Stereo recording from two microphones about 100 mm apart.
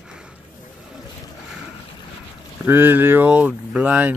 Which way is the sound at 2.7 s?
20° right (ahead or behind).